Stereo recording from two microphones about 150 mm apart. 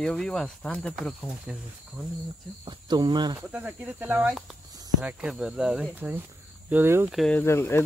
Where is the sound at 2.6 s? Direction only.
30° right (ahead or behind).